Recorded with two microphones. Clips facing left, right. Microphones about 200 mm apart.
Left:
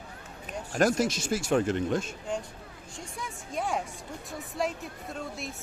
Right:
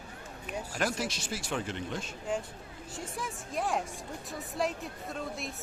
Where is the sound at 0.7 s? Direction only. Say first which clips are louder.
Left 9 dB; 45° left (ahead or behind).